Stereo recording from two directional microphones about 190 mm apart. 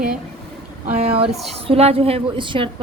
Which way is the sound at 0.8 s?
35° right (ahead or behind).